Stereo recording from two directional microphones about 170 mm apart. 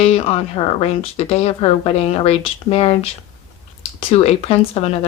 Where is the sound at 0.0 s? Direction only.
35° left (ahead or behind).